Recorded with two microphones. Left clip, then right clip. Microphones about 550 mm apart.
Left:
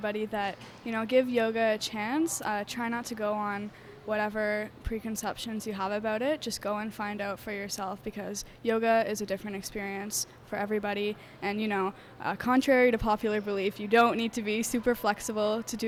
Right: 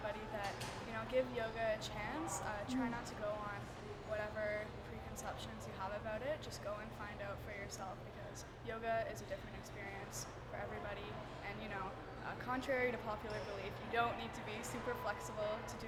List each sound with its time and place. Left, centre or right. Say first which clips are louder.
0.0 s speech: left 12 dB; left